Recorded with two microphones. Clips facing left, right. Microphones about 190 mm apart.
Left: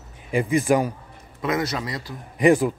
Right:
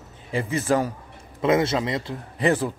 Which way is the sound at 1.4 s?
25° right (ahead or behind).